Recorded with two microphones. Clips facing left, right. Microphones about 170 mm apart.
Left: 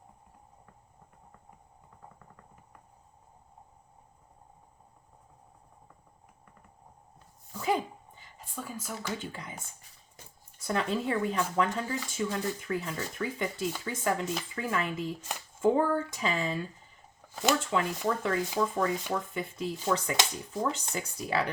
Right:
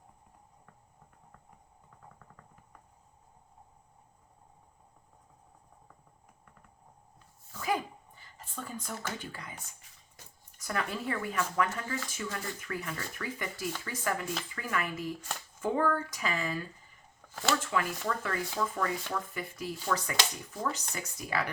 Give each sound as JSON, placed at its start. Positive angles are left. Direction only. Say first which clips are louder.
{"t": 7.5, "sound": "a sound", "louder": "left 3 dB", "side_deg": 20}
{"t": 9.1, "sound": "speech", "louder": "left 4 dB", "side_deg": 20}
{"t": 10.6, "sound": "speech", "louder": "left 5 dB", "side_deg": 25}